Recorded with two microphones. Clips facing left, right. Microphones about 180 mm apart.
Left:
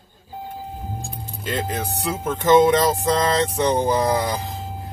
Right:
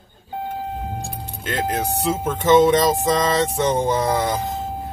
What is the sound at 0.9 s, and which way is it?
Keys jangling, 70° right (ahead or behind).